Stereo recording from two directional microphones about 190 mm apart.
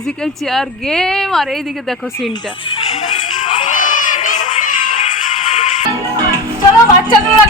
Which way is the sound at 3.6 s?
40° left (ahead or behind).